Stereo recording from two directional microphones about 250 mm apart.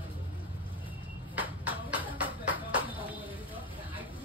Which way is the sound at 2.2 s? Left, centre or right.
Centre.